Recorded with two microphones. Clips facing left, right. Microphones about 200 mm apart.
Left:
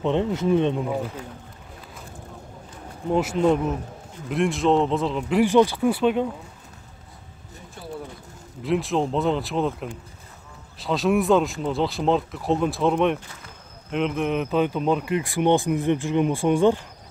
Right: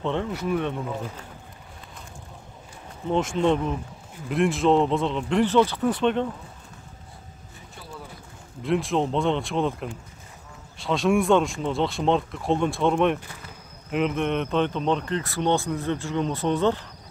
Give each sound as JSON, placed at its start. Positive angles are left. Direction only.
{"t": 0.0, "sound": "speech", "side_deg": 20}
{"t": 3.1, "sound": "speech", "side_deg": 5}
{"t": 8.6, "sound": "speech", "side_deg": 0}